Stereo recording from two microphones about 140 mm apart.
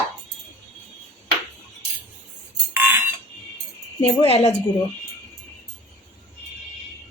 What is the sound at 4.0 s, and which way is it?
Speech, 45° left (ahead or behind).